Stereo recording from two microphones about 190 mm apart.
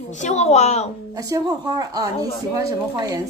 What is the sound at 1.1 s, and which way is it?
Speech, 20° right (ahead or behind).